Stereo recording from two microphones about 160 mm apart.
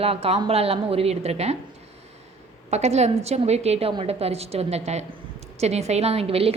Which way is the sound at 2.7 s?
45° right (ahead or behind).